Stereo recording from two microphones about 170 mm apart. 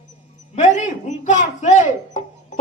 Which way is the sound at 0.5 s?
45° left (ahead or behind).